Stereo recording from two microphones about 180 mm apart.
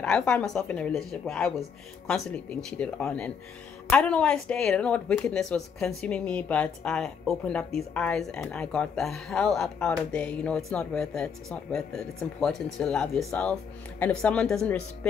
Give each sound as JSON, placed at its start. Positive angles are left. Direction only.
{"t": 0.0, "sound": "speech", "side_deg": 5}